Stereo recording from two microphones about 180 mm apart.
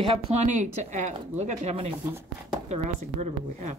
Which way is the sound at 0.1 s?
40° right (ahead or behind).